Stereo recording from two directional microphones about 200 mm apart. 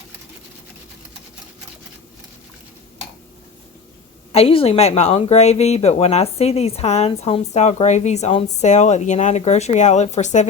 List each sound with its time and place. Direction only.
4.3 s speech: 30° left (ahead or behind)